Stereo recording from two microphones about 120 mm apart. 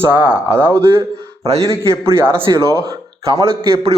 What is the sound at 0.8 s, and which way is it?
A man's voice, 20° right (ahead or behind).